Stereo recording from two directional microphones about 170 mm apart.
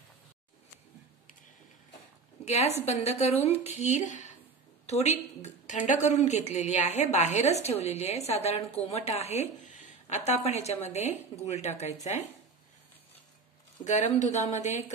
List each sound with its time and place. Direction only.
2.4 s a woman's voice: 40° left (ahead or behind)
13.8 s speech: 45° left (ahead or behind)